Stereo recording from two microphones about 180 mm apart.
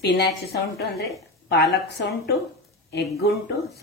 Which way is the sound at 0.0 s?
65° left (ahead or behind).